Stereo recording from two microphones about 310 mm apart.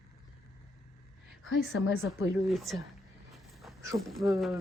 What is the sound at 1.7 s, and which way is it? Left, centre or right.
Speech, left.